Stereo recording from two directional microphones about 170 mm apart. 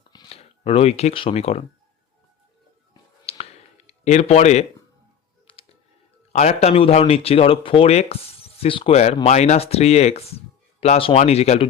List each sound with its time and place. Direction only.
0.1 s speech: 30° left (ahead or behind)
3.3 s music: 35° left (ahead or behind)
3.8 s speech: 40° left (ahead or behind)
5.5 s music: 30° left (ahead or behind)
6.3 s speech: 40° left (ahead or behind)